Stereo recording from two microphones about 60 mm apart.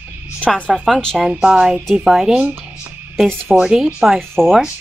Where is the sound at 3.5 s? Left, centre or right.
Centre.